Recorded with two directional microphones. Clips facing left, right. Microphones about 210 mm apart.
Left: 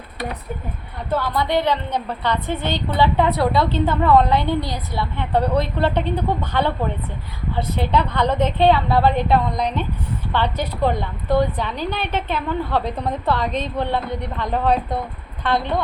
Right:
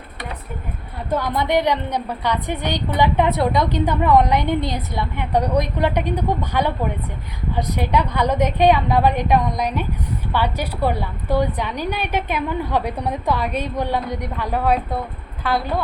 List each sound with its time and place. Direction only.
1.1 s a woman's voice: 15° right (ahead or behind)